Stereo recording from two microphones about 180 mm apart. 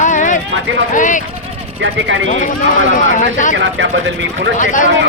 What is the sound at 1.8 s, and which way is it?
Speech, 90° right.